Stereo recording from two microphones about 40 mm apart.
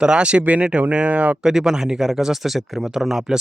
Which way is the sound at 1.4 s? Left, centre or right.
Centre.